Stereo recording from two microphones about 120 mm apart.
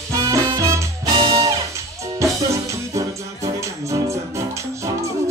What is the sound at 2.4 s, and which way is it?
Music, 25° right (ahead or behind).